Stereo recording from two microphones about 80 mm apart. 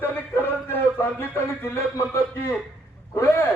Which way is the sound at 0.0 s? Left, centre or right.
Left.